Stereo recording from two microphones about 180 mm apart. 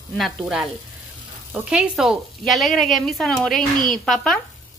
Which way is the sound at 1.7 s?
5° right (ahead or behind).